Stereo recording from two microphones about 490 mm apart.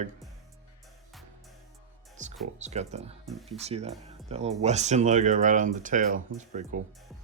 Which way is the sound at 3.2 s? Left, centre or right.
Centre.